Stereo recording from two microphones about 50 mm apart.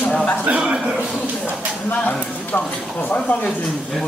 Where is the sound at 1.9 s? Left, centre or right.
Left.